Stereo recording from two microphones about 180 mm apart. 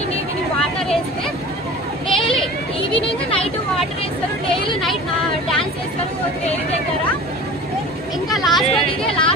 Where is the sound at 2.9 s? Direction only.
30° left (ahead or behind).